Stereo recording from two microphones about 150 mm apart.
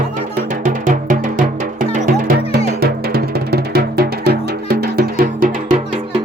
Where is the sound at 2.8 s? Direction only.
90° right.